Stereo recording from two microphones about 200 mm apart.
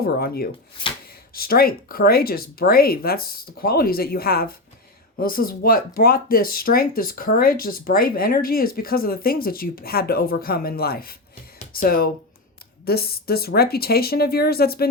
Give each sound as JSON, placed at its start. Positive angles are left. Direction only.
{"t": 0.0, "sound": "speech", "side_deg": 50}